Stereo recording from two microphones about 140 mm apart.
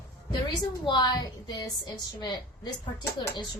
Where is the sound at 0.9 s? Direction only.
30° left (ahead or behind).